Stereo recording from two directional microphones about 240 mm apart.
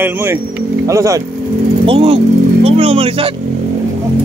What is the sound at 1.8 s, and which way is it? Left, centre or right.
Vehicle, right.